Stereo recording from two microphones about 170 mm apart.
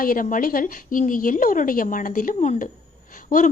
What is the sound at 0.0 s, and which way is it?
A woman's voice, 55° left (ahead or behind).